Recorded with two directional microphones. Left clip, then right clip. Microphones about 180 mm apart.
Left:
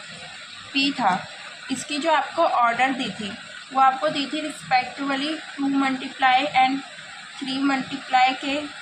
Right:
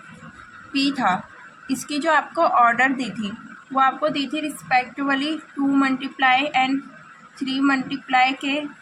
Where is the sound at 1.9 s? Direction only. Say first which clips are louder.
Right 1 dB; 55° right (ahead or behind).